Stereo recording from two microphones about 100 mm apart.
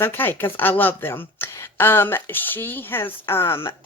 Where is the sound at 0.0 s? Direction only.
20° left (ahead or behind).